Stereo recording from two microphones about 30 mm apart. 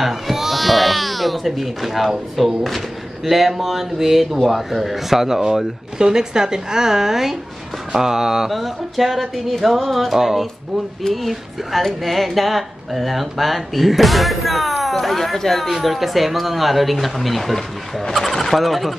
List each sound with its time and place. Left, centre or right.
0.0 s baby cry: centre
2.3 s speech: centre
8.0 s a sound: centre
8.5 s speech: centre
10.1 s a sound: centre
11.0 s speech: left
12.0 s speech: centre
15.7 s speech: centre